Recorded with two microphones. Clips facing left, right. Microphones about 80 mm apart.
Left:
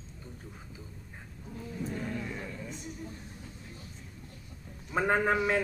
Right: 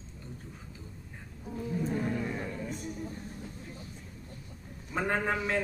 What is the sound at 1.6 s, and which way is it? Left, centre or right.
Speech, right.